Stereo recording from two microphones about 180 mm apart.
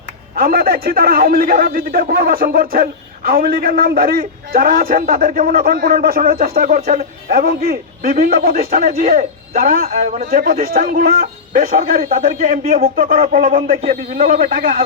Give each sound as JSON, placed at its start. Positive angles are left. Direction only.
{"t": 0.3, "sound": "a man's voice", "side_deg": -55}
{"t": 13.6, "sound": "a man's voice", "side_deg": -40}
{"t": 14.3, "sound": "speech", "side_deg": -50}